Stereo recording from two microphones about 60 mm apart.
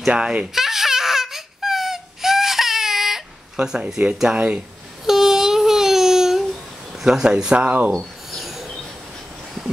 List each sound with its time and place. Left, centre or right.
0.1 s speech: centre
0.6 s baby cry: centre
3.5 s speech: centre
5.0 s a sound: centre
7.0 s speech: centre
8.3 s a sound: centre